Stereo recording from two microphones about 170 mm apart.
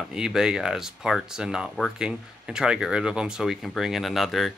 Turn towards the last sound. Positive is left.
turn(degrees=0)  # may be behind; listen again after turning